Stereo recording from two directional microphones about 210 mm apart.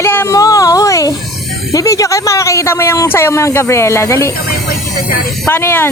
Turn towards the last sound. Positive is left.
turn(degrees=10)  # may be behind; listen again after turning